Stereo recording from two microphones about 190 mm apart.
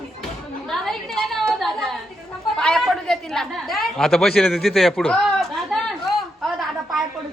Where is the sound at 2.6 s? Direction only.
5° left (ahead or behind).